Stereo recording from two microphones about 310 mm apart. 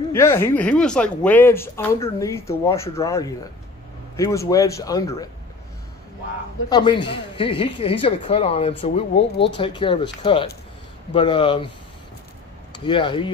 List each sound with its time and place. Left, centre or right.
0.1 s speech: centre
6.7 s speech: centre
12.7 s speech: centre